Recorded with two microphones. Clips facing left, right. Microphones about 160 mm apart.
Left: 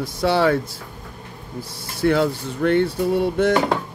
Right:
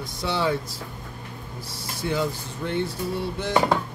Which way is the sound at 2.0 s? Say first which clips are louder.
Left 8 dB; 65° left (ahead or behind).